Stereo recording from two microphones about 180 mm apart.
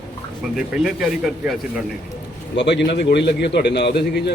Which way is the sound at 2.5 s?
75° left (ahead or behind).